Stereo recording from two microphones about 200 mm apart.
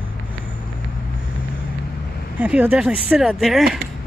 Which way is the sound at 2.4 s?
5° right (ahead or behind).